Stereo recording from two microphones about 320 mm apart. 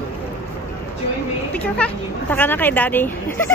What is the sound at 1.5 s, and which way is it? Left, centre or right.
Speech, centre.